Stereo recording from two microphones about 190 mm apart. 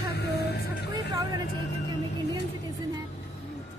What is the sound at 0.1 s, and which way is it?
Music, 60° left (ahead or behind).